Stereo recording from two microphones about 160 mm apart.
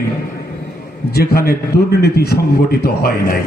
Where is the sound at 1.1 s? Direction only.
75° left (ahead or behind).